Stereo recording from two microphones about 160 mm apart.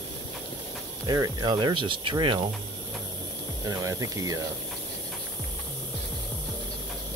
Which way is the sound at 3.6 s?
20° right (ahead or behind).